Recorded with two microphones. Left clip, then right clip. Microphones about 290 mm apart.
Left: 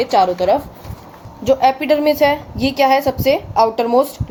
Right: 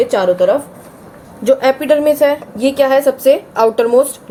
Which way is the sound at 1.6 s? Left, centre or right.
Centre.